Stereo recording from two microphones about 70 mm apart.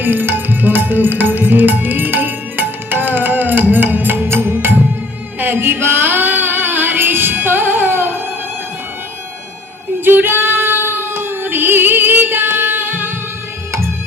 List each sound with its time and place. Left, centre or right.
0.0 s music: right
10.0 s female singing: right